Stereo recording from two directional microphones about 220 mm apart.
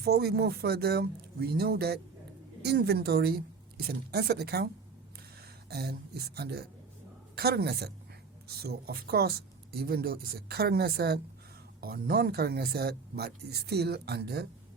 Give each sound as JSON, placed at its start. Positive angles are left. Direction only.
{"t": 0.0, "sound": "speech", "side_deg": -45}